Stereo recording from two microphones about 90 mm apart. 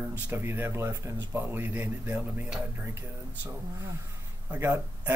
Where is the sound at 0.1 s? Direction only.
25° right (ahead or behind).